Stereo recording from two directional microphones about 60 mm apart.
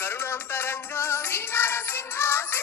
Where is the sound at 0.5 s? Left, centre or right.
Left.